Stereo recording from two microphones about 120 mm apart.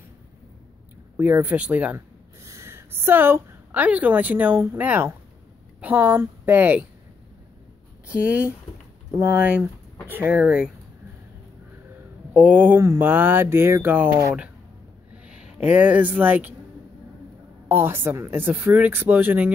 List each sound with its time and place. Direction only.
1.1 s speech: 15° right (ahead or behind)
2.4 s a woman's voice: 25° right (ahead or behind)
8.1 s speech: 10° right (ahead or behind)
12.4 s speech: 15° right (ahead or behind)
17.6 s speech: 20° right (ahead or behind)